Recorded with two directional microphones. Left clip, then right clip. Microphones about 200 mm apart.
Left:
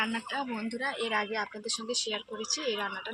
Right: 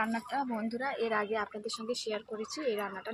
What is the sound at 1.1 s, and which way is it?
Speech, 15° right (ahead or behind).